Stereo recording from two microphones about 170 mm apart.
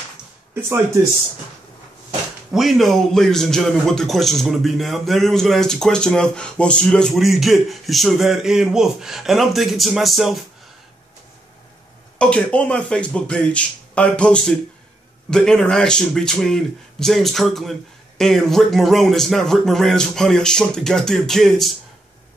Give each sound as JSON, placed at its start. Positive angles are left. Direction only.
{"t": 0.6, "sound": "speech", "side_deg": -15}
{"t": 2.5, "sound": "speech", "side_deg": 0}
{"t": 12.2, "sound": "speech", "side_deg": 5}